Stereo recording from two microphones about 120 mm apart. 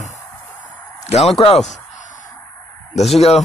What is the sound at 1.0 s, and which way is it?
Speech, 60° left (ahead or behind).